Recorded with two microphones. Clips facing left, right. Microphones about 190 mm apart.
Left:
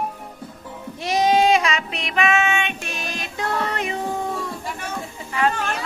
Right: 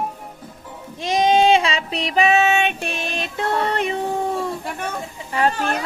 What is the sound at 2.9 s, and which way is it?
Music, 25° right (ahead or behind).